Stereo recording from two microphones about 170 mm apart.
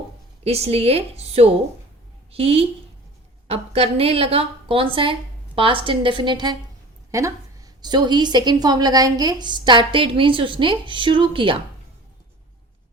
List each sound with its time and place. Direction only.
0.4 s a woman's voice: 35° right (ahead or behind)